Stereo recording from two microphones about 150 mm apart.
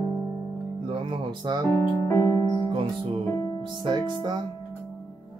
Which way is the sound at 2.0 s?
20° left (ahead or behind).